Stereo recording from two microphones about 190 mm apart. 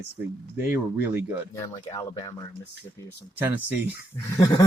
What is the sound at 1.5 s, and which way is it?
Speech, 20° left (ahead or behind).